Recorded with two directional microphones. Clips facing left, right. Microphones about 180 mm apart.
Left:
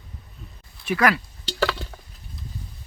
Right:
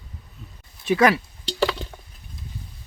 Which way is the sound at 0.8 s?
25° right (ahead or behind).